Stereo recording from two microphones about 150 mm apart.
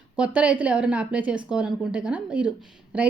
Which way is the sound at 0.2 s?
10° right (ahead or behind).